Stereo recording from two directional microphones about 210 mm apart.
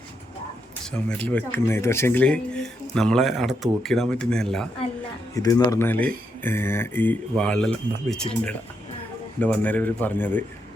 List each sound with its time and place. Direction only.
0.9 s speech: 5° left (ahead or behind)
5.3 s speech: 15° left (ahead or behind)